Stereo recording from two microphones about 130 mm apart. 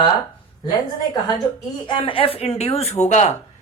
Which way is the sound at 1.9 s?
40° left (ahead or behind).